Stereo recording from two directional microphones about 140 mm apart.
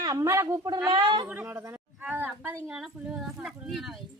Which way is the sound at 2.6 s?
5° right (ahead or behind).